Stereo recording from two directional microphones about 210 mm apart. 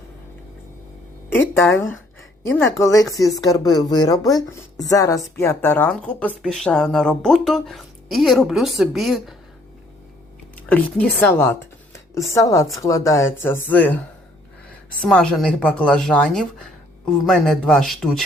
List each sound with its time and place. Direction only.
1.3 s speech: 10° left (ahead or behind)
2.7 s a woman's voice: 15° left (ahead or behind); by 9.3 s centre (ahead or behind)
10.7 s speech: 5° left (ahead or behind)
15.0 s a woman's voice: 5° left (ahead or behind)